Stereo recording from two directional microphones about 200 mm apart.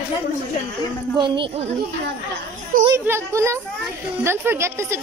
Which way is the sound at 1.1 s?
25° right (ahead or behind).